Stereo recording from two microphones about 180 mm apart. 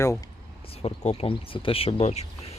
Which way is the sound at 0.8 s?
35° left (ahead or behind).